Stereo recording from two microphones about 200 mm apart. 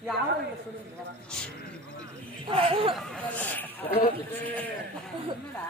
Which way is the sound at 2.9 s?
5° left (ahead or behind).